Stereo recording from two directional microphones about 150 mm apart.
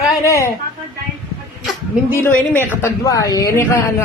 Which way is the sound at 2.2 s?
15° left (ahead or behind).